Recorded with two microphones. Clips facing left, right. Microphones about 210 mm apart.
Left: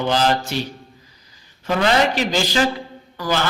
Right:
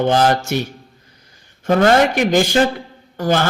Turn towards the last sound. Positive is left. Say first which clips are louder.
# right 5 dB
turn(degrees=-50)  # may be behind; listen again after turning